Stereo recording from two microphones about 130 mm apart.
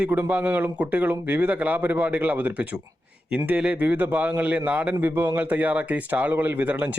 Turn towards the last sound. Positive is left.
turn(degrees=-10)  # may be behind; listen again after turning